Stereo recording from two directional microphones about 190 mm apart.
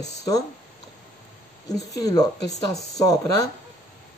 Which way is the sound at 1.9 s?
20° left (ahead or behind).